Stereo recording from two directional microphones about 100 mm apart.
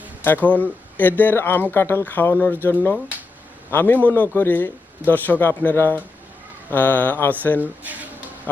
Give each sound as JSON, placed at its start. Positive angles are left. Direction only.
{"t": 0.4, "sound": "a man's voice", "side_deg": 15}
{"t": 7.6, "sound": "speech", "side_deg": -15}